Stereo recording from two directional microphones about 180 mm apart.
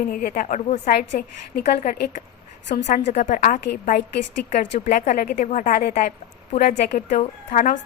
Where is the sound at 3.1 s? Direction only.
40° left (ahead or behind).